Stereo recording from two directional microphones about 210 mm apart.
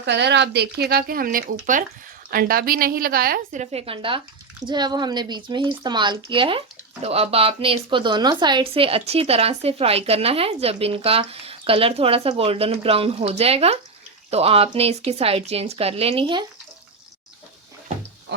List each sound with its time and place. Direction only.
0.0 s a woman's voice: 55° right (ahead or behind); by 16.5 s 25° right (ahead or behind)